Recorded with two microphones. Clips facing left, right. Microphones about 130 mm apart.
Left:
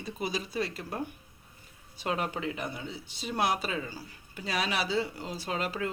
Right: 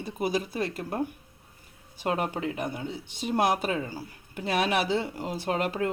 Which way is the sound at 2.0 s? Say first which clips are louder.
Right 3 dB; 50° right (ahead or behind).